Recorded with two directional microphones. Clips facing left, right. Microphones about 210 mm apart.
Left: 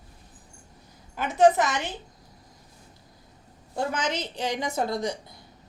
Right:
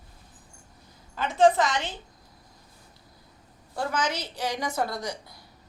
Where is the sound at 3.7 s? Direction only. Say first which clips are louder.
Left 1 dB; 20° left (ahead or behind).